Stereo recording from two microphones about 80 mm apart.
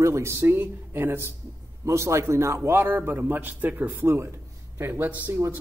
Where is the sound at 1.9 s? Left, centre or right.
Right.